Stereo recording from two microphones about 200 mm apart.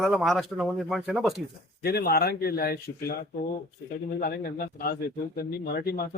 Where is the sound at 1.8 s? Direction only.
50° left (ahead or behind).